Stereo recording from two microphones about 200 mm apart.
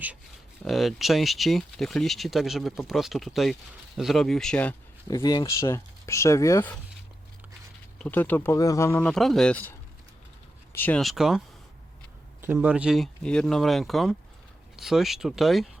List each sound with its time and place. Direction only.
0.6 s speech: centre (ahead or behind)
5.0 s speech: 20° left (ahead or behind)
7.9 s speech: 10° left (ahead or behind)